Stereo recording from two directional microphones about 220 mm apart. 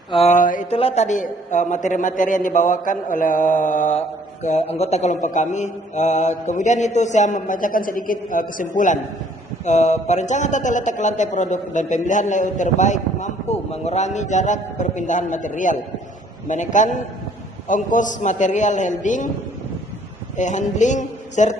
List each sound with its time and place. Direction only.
0.1 s a man's voice: 30° left (ahead or behind)
20.3 s a man's voice: 35° left (ahead or behind)